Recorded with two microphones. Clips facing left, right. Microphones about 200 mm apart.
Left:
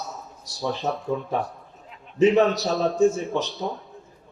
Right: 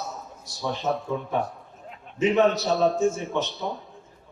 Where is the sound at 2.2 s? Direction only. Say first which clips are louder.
Left 3 dB; 35° left (ahead or behind).